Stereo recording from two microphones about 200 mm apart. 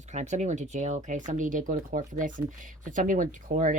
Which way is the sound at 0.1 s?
35° right (ahead or behind).